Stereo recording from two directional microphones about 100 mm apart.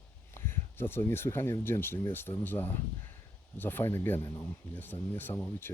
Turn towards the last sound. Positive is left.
turn(degrees=20)  # may be behind; listen again after turning